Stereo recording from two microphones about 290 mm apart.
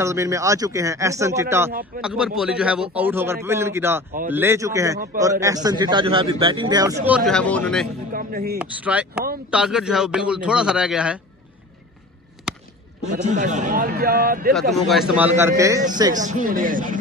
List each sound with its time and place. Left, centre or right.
0.0 s a man's voice: centre
8.1 s a man's voice: right
8.5 s a man's voice: centre
12.5 s a sound: centre
13.1 s a man's voice: right
14.5 s a man's voice: centre
16.2 s a man's voice: right